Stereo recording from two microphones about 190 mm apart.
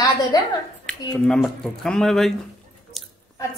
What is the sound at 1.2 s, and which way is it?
Speech, centre (ahead or behind).